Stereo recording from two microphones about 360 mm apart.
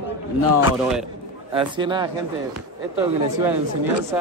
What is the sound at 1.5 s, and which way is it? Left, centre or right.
Speech, centre.